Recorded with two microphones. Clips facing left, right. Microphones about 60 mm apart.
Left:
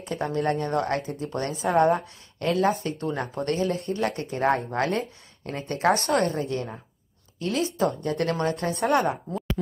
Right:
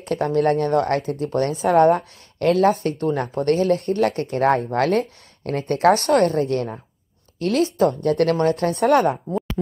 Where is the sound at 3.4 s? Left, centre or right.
Right.